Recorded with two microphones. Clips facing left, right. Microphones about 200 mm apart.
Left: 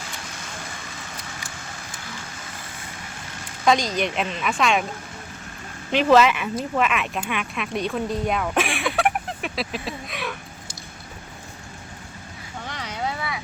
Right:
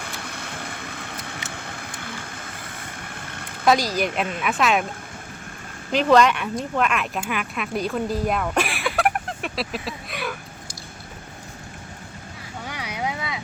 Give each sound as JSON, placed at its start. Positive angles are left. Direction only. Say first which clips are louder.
{"t": 0.0, "sound": "vehicle", "louder": "right 3 dB", "side_deg": -60}
{"t": 3.6, "sound": "a woman's voice", "louder": "right 1 dB", "side_deg": -5}
{"t": 5.9, "sound": "speech", "louder": "even", "side_deg": 0}
{"t": 12.6, "sound": "a sound", "louder": "even", "side_deg": -10}